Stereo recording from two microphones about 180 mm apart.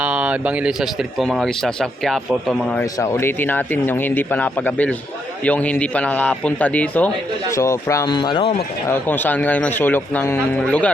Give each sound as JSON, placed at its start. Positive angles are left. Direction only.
{"t": 0.0, "sound": "speech", "side_deg": -5}
{"t": 3.0, "sound": "speech", "side_deg": 15}
{"t": 8.9, "sound": "speech", "side_deg": 10}